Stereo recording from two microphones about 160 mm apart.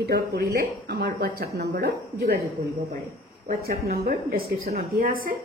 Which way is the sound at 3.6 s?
80° right.